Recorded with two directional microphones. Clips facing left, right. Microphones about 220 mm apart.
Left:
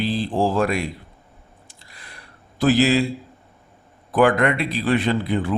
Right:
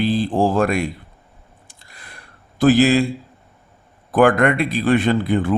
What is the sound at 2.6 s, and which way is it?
Speech, 50° right (ahead or behind).